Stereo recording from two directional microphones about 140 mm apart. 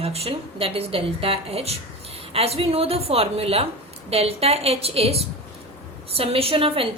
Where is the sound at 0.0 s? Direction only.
45° right (ahead or behind).